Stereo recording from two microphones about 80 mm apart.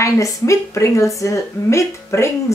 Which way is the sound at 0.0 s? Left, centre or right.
Left.